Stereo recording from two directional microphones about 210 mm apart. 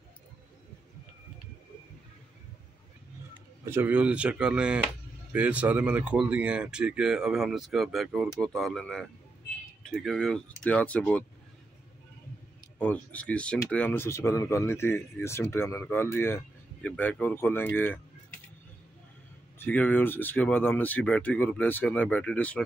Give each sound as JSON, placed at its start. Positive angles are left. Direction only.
{"t": 3.6, "sound": "speech", "side_deg": -10}
{"t": 12.7, "sound": "speech", "side_deg": 5}
{"t": 19.6, "sound": "speech", "side_deg": 10}